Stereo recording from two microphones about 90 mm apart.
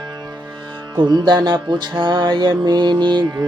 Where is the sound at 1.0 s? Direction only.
55° right (ahead or behind).